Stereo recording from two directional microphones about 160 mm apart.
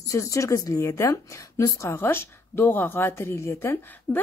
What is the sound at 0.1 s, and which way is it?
A woman's voice, 20° left (ahead or behind).